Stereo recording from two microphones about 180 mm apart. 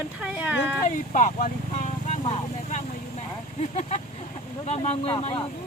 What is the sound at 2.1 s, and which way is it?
Vehicle, 40° left (ahead or behind).